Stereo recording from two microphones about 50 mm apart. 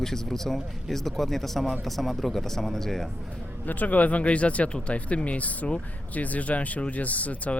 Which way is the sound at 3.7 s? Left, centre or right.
Left.